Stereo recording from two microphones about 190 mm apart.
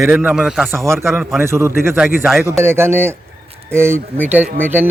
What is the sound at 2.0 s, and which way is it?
Speech, centre (ahead or behind).